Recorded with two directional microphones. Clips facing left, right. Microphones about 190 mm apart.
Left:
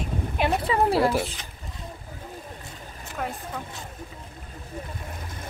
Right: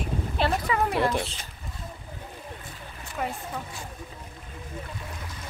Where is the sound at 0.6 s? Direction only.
30° left (ahead or behind).